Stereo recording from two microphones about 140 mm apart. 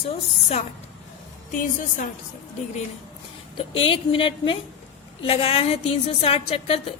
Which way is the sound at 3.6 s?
40° left (ahead or behind).